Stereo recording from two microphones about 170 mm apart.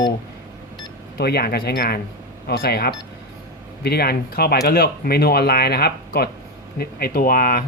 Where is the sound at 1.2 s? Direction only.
70° left (ahead or behind).